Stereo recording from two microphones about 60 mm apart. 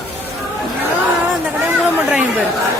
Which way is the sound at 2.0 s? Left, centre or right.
Right.